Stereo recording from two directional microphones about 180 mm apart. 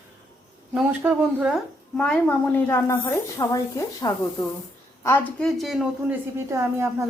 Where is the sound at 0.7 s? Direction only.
5° right (ahead or behind).